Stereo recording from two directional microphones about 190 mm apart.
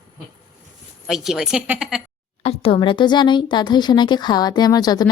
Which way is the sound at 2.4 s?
30° left (ahead or behind).